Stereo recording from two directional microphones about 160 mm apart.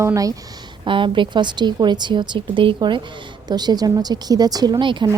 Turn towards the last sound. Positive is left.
turn(degrees=-30)  # may be behind; listen again after turning